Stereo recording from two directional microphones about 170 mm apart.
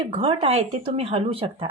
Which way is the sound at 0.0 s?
30° right (ahead or behind).